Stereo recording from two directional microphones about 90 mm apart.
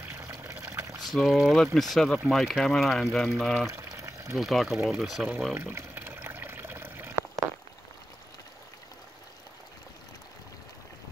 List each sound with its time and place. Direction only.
0.1 s water: 30° right (ahead or behind)
1.0 s speech: centre (ahead or behind)
3.7 s boiling: 35° right (ahead or behind)
4.4 s speech: centre (ahead or behind)
5.5 s pour: 25° right (ahead or behind)